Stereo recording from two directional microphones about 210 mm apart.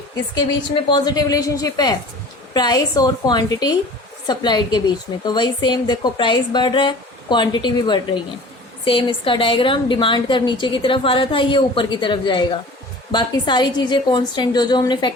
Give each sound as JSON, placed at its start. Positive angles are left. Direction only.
{"t": 0.9, "sound": "a woman's voice", "side_deg": 20}